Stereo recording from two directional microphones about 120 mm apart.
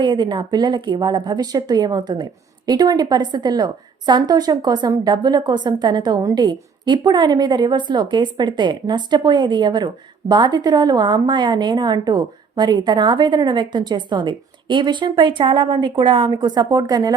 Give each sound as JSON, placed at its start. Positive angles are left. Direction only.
{"t": 0.0, "sound": "speech", "side_deg": -40}